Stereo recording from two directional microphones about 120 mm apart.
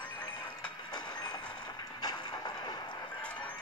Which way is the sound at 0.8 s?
35° left (ahead or behind).